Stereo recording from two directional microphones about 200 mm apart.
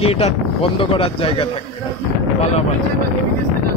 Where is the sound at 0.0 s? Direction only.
30° left (ahead or behind).